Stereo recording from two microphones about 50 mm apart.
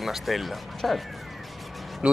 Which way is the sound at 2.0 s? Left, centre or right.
Right.